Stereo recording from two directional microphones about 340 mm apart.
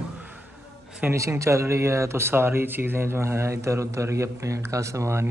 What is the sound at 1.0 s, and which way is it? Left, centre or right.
Speech, centre.